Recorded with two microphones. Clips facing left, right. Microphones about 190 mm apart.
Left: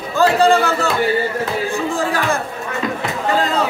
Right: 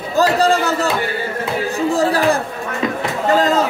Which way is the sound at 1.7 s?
35° right (ahead or behind).